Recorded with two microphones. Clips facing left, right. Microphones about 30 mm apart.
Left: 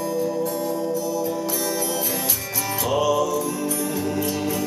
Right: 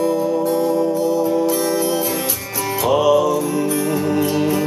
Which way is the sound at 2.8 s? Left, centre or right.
Right.